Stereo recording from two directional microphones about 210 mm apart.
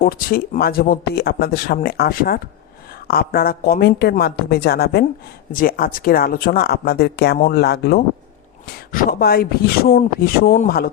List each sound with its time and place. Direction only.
0.0 s speech: 45° left (ahead or behind)